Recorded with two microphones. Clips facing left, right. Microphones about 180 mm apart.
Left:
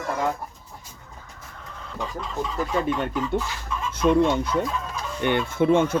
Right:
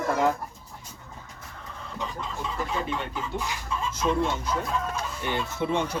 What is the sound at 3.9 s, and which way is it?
Speech, 60° left (ahead or behind).